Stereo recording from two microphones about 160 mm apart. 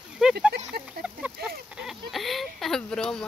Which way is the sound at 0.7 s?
75° right (ahead or behind).